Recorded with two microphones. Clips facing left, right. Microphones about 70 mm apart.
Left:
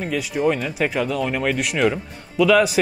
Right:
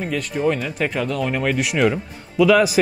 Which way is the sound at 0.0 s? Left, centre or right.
Centre.